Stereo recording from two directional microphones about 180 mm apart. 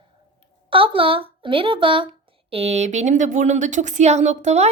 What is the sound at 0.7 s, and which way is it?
A woman's voice, 30° right (ahead or behind).